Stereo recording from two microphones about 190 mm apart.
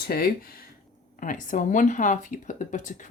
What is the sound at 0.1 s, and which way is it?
Speech, 50° left (ahead or behind).